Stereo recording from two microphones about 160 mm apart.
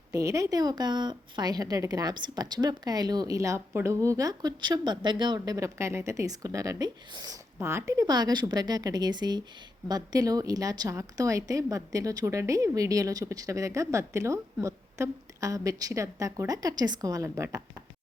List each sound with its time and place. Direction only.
0.1 s a woman's voice: 20° right (ahead or behind)